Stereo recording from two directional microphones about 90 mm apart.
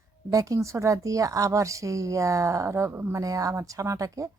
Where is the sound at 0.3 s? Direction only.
40° right (ahead or behind).